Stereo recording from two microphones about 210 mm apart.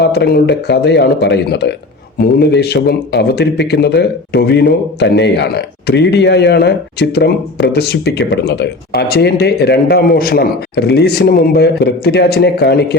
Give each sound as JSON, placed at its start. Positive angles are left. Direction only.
{"t": 0.0, "sound": "speech", "side_deg": 50}